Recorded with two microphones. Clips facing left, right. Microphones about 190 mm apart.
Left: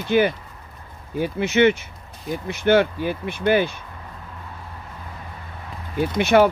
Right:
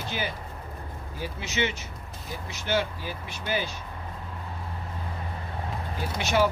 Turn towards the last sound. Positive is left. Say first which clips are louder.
# left 9 dB
turn(degrees=60)  # may be behind; listen again after turning